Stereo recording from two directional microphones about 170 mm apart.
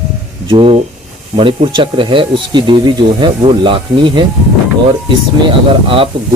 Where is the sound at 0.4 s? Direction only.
30° right (ahead or behind).